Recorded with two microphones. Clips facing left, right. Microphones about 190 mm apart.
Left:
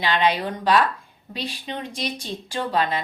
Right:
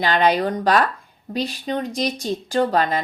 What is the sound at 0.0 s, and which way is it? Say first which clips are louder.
Speech: right 4 dB; 45° right (ahead or behind).